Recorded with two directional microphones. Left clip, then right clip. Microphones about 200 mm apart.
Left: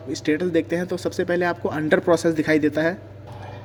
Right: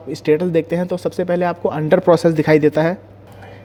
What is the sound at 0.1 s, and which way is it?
Speech, 35° right (ahead or behind).